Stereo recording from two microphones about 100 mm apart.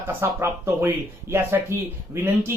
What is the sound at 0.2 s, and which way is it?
Speech, 25° right (ahead or behind).